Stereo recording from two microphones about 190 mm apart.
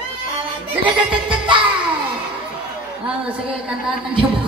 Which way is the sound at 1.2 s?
25° right (ahead or behind).